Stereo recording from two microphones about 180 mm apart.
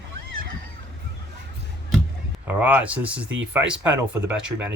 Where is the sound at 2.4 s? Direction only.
10° right (ahead or behind).